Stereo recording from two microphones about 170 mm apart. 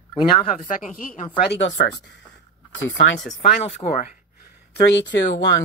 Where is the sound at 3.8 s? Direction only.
30° left (ahead or behind).